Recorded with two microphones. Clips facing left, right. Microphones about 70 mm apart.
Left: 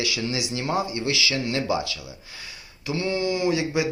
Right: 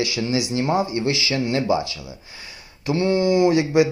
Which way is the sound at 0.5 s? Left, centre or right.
Right.